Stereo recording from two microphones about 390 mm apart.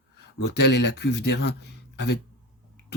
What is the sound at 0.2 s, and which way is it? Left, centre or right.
Speech, left.